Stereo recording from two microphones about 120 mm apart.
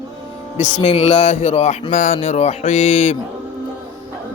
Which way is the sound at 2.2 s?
65° left (ahead or behind).